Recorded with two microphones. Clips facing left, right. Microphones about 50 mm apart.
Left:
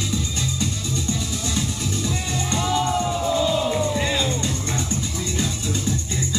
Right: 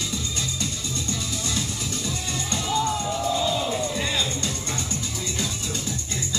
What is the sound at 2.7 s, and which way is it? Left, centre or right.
Music, left.